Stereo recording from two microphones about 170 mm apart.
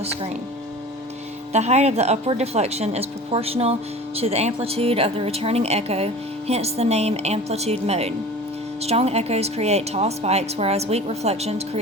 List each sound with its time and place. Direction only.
1.5 s speech: 40° right (ahead or behind)